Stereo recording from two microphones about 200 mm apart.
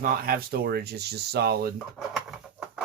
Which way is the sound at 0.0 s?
50° right (ahead or behind).